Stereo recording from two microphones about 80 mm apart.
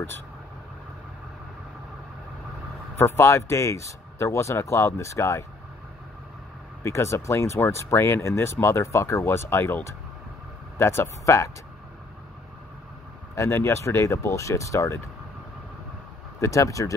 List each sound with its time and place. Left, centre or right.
3.0 s speech: left
6.8 s speech: left
10.8 s speech: left
13.3 s speech: left
16.3 s speech: left